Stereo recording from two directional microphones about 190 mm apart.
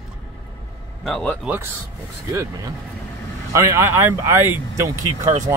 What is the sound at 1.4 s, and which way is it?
Speech, 10° right (ahead or behind).